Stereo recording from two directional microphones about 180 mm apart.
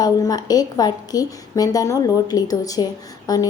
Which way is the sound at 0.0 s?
20° left (ahead or behind).